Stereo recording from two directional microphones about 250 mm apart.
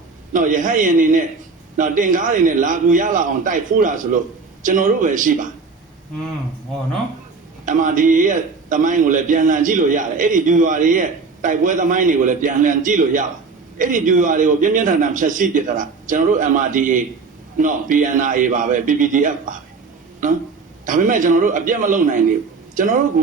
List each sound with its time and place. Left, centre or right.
0.3 s a man's voice: right
7.6 s a man's voice: right